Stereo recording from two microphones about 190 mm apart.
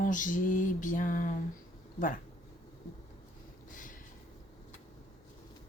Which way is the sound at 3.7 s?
45° left (ahead or behind).